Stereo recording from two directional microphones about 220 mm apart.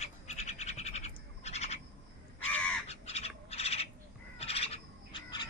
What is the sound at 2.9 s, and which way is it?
Bird, 30° left (ahead or behind).